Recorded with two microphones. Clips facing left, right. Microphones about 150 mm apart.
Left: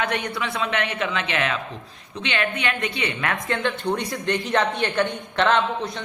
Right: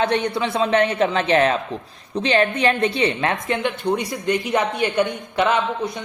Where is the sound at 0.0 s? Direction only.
30° right (ahead or behind).